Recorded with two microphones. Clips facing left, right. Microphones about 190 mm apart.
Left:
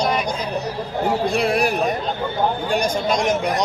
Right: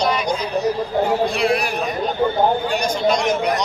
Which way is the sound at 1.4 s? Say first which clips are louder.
Left 1 dB; 50° left (ahead or behind).